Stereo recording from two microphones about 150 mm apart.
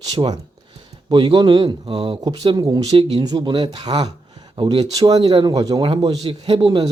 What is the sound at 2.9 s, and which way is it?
Speech, 40° right (ahead or behind).